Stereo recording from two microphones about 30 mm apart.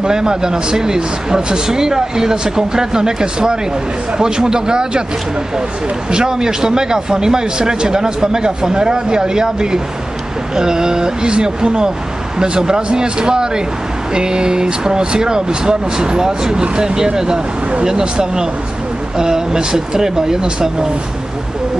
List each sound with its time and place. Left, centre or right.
0.0 s a man's voice: right
6.1 s a man's voice: right
19.1 s a man's voice: right